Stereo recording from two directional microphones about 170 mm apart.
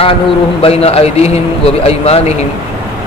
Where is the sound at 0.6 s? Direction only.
35° left (ahead or behind).